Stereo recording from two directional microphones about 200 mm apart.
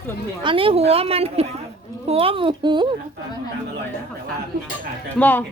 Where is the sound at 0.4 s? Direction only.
25° right (ahead or behind).